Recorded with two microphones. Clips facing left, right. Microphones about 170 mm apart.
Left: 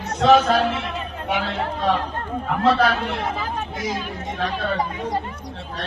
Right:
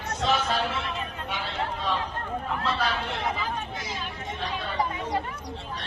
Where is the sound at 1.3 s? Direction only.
65° left (ahead or behind).